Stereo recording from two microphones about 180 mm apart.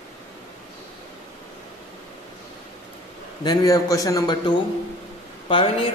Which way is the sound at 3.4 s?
20° left (ahead or behind).